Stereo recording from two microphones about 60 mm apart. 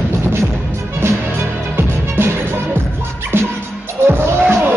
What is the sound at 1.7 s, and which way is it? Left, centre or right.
Music, right.